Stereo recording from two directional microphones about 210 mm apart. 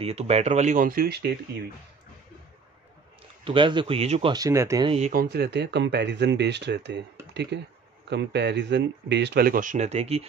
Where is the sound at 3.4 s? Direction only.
25° right (ahead or behind).